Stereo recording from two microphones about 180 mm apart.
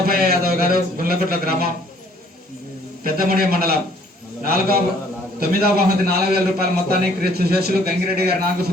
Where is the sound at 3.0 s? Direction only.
55° right (ahead or behind).